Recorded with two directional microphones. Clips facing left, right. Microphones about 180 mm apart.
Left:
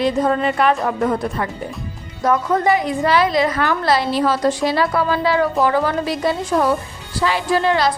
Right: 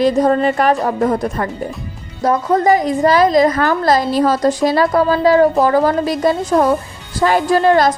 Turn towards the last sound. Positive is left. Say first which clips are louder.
# right 5 dB
turn(degrees=-45)  # may be behind; listen again after turning